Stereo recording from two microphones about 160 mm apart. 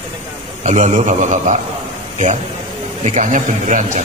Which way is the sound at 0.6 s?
50° right (ahead or behind).